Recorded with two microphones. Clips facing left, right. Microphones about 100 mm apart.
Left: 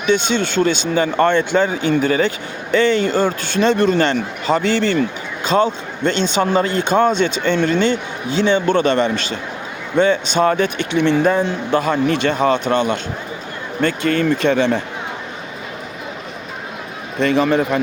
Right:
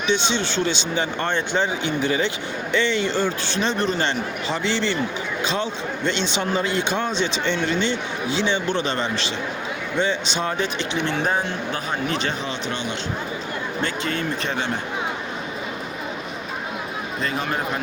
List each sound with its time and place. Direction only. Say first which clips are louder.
0.0 s a man's voice: left 5 dB; 50° left (ahead or behind)
11.3 s a man's voice: left 7 dB; 80° left; by 13.0 s 50° left (ahead or behind)
13.8 s speech: left 11 dB; 60° left (ahead or behind); by 14.8 s 90° left
17.2 s a man's voice: left 11 dB; 90° left